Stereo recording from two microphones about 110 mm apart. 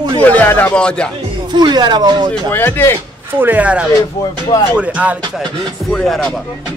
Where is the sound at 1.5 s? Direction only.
40° right (ahead or behind).